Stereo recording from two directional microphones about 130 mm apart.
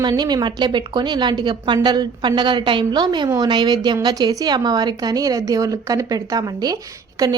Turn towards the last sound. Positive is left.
turn(degrees=-25)  # may be behind; listen again after turning